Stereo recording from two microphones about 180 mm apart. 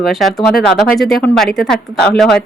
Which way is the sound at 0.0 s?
Centre (ahead or behind).